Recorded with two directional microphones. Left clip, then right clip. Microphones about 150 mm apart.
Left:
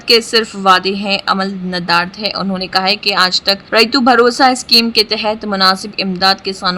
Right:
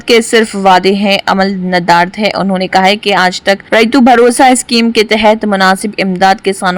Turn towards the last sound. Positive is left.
turn(degrees=-35)  # may be behind; listen again after turning